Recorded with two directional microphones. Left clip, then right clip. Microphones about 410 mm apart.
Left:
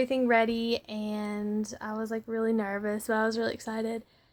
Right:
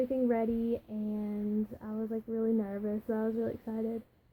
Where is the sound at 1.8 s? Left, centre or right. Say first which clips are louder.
Left 4 dB; centre.